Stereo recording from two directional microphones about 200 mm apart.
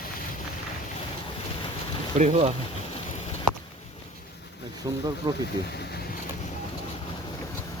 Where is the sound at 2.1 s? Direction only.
35° right (ahead or behind).